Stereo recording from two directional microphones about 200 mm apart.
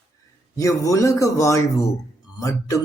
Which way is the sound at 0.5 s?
15° left (ahead or behind).